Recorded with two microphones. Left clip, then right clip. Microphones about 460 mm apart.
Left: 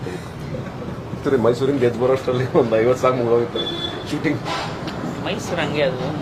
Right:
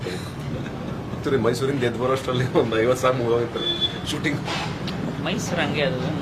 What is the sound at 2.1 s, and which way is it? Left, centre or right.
Speech, left.